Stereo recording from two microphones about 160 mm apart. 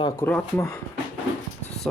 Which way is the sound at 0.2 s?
10° left (ahead or behind).